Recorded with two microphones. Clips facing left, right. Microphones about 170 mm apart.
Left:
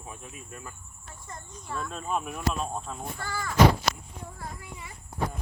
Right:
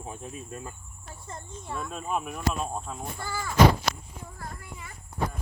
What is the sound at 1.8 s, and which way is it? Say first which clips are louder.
Speech: even; 5° right (ahead or behind).